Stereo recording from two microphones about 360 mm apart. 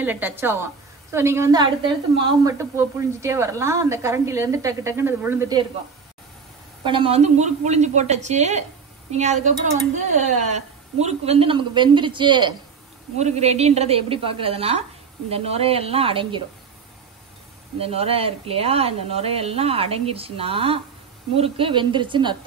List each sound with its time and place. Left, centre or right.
0.0 s a woman's voice: centre
6.8 s a woman's voice: centre
17.7 s a woman's voice: centre